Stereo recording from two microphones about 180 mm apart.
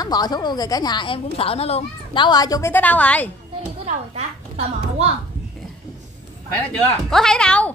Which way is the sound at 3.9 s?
40° right (ahead or behind).